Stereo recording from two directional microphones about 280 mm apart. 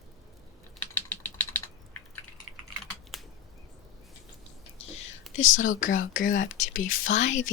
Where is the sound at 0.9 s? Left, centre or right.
Centre.